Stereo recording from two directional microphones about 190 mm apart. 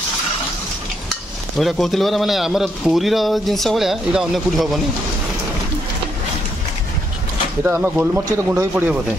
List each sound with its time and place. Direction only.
1.6 s a man's voice: centre (ahead or behind)
7.6 s speech: 10° right (ahead or behind)